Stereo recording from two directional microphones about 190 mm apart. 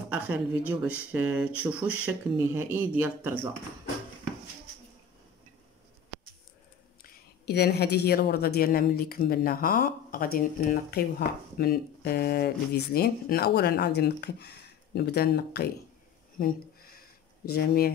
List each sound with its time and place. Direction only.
0.1 s speech: 5° right (ahead or behind)
7.0 s a woman's voice: 60° left (ahead or behind)
16.3 s a sound: 50° left (ahead or behind)
17.5 s a woman's voice: 55° left (ahead or behind)